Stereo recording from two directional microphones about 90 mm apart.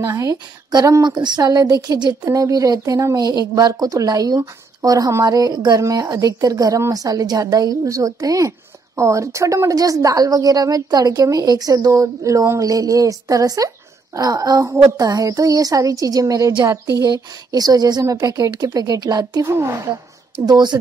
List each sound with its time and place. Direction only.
0.0 s a woman's voice: 35° right (ahead or behind)
0.7 s speech: 50° right (ahead or behind)
2.2 s a woman's voice: 40° right (ahead or behind)
14.7 s a woman's voice: 30° right (ahead or behind)
17.0 s speech: 45° right (ahead or behind)
19.4 s a woman's voice: 30° right (ahead or behind)
19.7 s speech: 45° right (ahead or behind)